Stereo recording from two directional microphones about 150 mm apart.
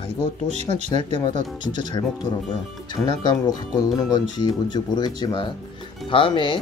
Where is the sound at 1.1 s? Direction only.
30° left (ahead or behind).